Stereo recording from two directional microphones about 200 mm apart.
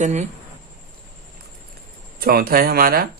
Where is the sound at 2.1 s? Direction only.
45° right (ahead or behind).